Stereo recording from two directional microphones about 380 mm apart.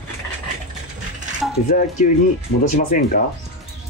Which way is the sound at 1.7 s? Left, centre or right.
Left.